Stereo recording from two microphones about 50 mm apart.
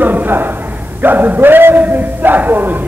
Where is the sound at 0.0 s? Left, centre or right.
Right.